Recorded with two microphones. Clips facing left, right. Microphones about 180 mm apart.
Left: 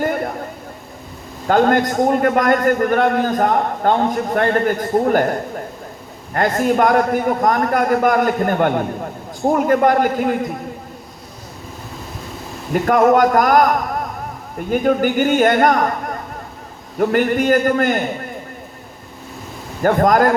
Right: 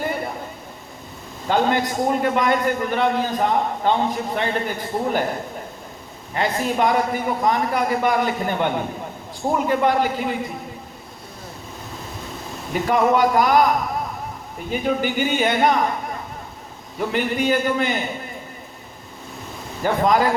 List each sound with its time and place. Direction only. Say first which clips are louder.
0.0 s a sound: left 5 dB; 50° left (ahead or behind)
1.5 s a man's voice: left 5 dB; 55° left (ahead or behind)
12.8 s a man's voice: left 5 dB; 45° left (ahead or behind)
19.8 s a man's voice: left 5 dB; 50° left (ahead or behind)